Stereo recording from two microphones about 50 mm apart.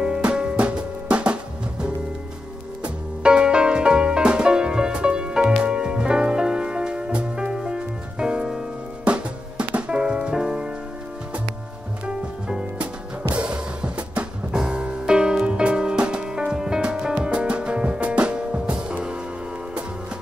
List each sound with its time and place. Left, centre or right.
0.0 s music: centre
12.1 s music: centre